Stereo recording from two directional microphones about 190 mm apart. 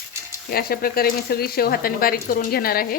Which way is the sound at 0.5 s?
50° left (ahead or behind).